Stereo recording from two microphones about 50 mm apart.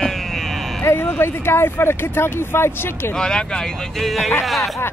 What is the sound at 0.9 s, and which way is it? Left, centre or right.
Speech, left.